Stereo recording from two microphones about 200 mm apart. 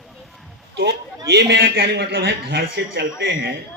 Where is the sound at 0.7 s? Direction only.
50° right (ahead or behind).